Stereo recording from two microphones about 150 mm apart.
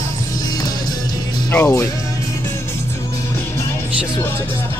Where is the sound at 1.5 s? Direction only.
15° left (ahead or behind).